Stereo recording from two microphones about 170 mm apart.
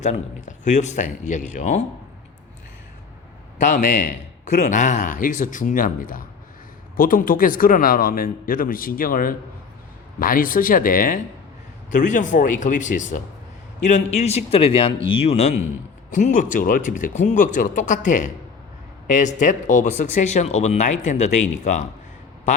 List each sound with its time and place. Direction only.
0.0 s speech: 45° left (ahead or behind)
3.6 s a man's voice: 45° left (ahead or behind)